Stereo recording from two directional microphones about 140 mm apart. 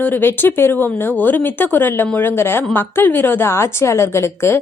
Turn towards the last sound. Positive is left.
turn(degrees=20)  # may be behind; listen again after turning